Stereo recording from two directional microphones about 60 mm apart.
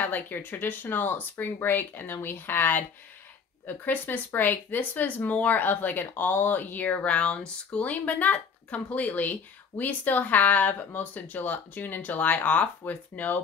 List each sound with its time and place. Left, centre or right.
0.0 s speech: left